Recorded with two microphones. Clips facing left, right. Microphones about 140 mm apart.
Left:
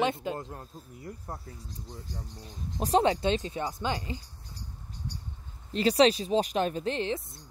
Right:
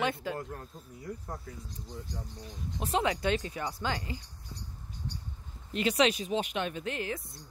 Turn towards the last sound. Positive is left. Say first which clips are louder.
# left 5 dB
turn(degrees=30)  # may be behind; listen again after turning